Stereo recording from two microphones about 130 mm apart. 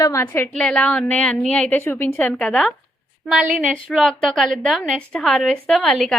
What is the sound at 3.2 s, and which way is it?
A woman's voice, 5° right (ahead or behind).